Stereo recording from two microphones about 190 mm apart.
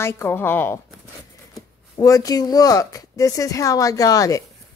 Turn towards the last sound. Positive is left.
turn(degrees=20)  # may be behind; listen again after turning